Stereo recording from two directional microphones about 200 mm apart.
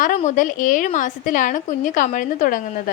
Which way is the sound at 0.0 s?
35° left (ahead or behind).